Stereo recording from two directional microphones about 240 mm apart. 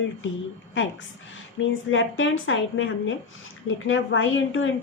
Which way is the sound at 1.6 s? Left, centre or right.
Left.